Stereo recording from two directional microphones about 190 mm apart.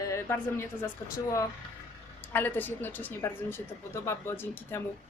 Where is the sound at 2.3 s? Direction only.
10° left (ahead or behind).